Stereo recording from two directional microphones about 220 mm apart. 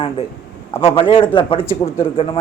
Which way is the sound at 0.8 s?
25° left (ahead or behind).